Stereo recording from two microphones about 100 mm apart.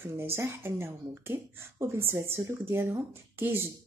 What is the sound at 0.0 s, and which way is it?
Speech, 25° right (ahead or behind).